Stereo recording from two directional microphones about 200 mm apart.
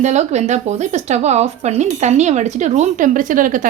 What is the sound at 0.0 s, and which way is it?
Speech, 35° right (ahead or behind).